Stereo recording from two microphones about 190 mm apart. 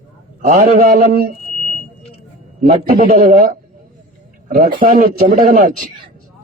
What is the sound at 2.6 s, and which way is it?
Speech, 40° right (ahead or behind).